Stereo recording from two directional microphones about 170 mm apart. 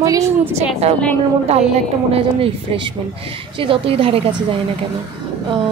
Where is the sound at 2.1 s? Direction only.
35° right (ahead or behind).